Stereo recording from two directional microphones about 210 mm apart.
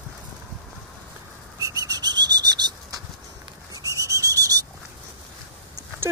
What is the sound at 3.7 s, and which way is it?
Owl, 15° right (ahead or behind).